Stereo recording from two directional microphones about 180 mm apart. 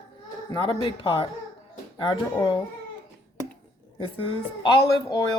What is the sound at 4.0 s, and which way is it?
Speech, 30° left (ahead or behind).